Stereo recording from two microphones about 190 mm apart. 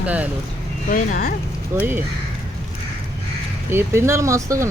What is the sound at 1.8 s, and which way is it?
Speech, 10° right (ahead or behind).